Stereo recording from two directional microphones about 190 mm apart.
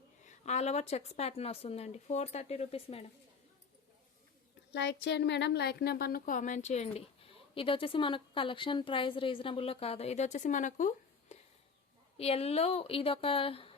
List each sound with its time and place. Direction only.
0.3 s a woman's voice: 35° left (ahead or behind)
4.7 s a woman's voice: 65° left (ahead or behind); by 13.7 s 30° left (ahead or behind)